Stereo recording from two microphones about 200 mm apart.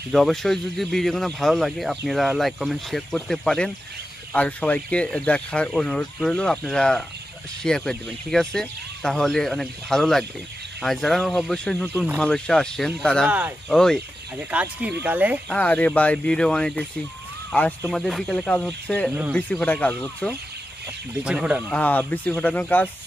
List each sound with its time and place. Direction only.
0.1 s speech: centre (ahead or behind)
15.5 s speech: 5° left (ahead or behind)
21.3 s speech: 5° right (ahead or behind)
21.7 s speech: 10° left (ahead or behind)